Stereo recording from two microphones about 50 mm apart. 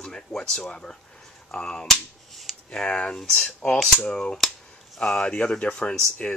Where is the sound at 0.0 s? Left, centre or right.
Centre.